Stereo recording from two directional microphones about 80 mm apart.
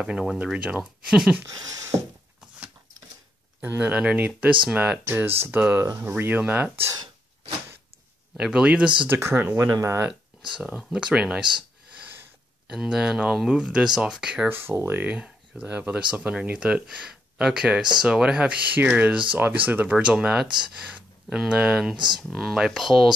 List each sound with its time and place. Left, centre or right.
0.0 s speech: centre
1.5 s speech: right
3.6 s speech: centre
5.0 s speech: right
8.4 s speech: centre
9.2 s speech: right
9.7 s speech: right
10.8 s speech: centre
12.6 s speech: centre
14.5 s speech: right
15.0 s speech: centre
21.9 s speech: right
22.3 s speech: centre